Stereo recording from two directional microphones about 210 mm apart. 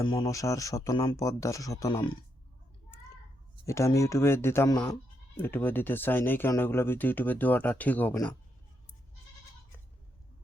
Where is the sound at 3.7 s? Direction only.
15° left (ahead or behind).